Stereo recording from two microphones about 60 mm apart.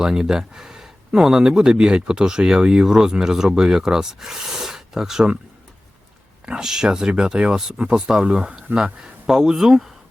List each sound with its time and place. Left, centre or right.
0.0 s speech: centre
6.4 s speech: centre